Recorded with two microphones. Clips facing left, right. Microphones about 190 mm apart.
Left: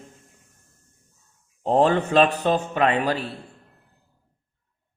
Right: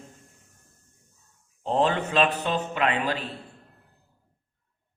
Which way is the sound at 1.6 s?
45° left (ahead or behind).